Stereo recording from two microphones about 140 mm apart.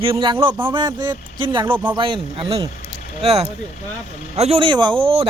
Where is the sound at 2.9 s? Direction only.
50° right (ahead or behind).